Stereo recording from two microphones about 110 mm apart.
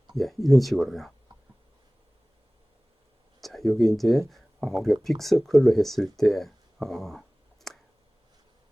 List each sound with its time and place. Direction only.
0.1 s speech: centre (ahead or behind)
3.4 s speech: centre (ahead or behind)